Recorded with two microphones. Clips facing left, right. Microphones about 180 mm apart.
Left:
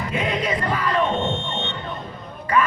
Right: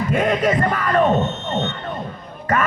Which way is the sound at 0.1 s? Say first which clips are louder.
Right 6 dB; 50° right (ahead or behind).